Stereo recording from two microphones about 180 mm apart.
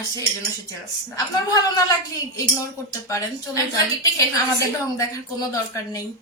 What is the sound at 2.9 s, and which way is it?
A woman's voice, 20° left (ahead or behind).